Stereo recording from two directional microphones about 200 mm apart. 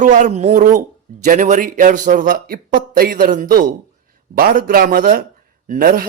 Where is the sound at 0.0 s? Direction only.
40° right (ahead or behind).